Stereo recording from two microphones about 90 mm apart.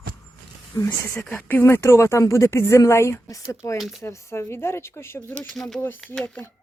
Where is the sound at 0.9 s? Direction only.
15° left (ahead or behind); by 3.4 s 35° left (ahead or behind).